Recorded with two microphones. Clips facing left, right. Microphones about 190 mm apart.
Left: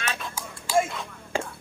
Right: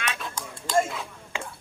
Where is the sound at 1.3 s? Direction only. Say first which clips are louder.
Left 6 dB; 40° left (ahead or behind).